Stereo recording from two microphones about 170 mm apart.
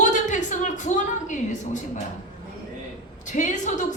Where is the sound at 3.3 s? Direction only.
45° left (ahead or behind).